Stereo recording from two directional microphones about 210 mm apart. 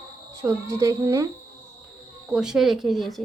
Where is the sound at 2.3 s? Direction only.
5° right (ahead or behind).